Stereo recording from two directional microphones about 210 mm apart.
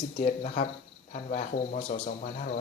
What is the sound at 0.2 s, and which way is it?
Speech, 30° left (ahead or behind).